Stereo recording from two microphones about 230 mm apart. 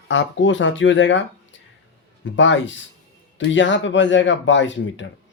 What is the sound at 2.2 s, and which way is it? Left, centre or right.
A man's voice, left.